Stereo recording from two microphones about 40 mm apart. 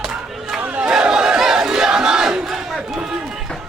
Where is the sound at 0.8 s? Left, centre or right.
Right.